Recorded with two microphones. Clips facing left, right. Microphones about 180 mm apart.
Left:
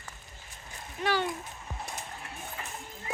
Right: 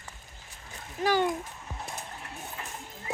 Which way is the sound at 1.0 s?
45° right (ahead or behind).